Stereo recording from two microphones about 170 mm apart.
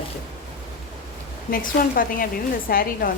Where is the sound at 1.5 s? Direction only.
55° left (ahead or behind).